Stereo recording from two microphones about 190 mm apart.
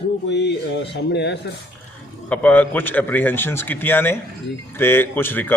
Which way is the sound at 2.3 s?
5° left (ahead or behind).